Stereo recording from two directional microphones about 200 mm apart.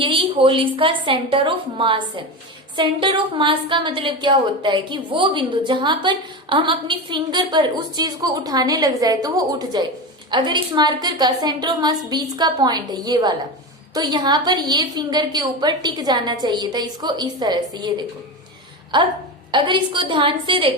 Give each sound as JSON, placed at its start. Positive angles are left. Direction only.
{"t": 0.0, "sound": "a woman's voice", "side_deg": -25}